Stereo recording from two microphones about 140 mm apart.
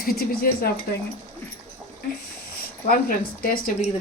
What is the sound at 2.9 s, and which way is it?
Speech, 90° left.